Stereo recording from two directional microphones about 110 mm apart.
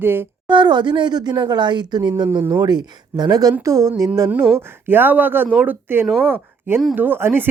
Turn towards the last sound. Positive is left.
turn(degrees=-20)  # may be behind; listen again after turning